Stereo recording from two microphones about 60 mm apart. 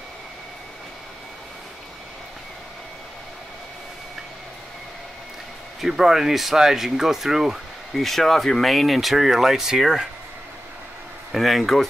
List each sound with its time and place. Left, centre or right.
5.8 s speech: centre
11.3 s speech: centre